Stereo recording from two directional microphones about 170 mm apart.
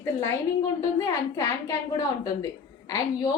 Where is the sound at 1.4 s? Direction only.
20° left (ahead or behind).